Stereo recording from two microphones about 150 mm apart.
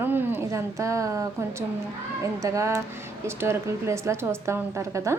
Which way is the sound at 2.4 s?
20° right (ahead or behind).